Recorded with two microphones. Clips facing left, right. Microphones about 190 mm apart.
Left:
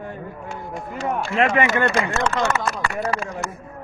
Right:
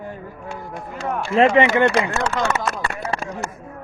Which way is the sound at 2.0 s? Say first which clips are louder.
Even; 15° right (ahead or behind).